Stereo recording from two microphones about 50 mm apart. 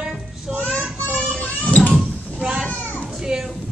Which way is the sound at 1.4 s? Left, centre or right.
Left.